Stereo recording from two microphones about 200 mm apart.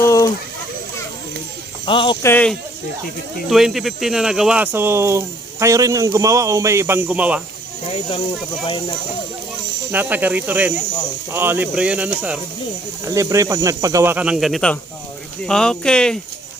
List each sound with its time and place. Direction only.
0.0 s a sound: 15° left (ahead or behind)
1.9 s speech: 25° left (ahead or behind)
2.2 s speech: 10° left (ahead or behind)
7.9 s speech: 30° left (ahead or behind)
9.9 s speech: 10° right (ahead or behind)